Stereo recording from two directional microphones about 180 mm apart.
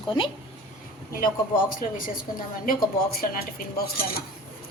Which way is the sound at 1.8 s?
50° left (ahead or behind).